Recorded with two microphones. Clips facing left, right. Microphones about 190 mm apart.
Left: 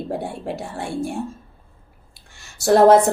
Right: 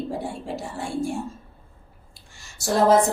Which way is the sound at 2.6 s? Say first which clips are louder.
Left 6 dB; 65° left (ahead or behind).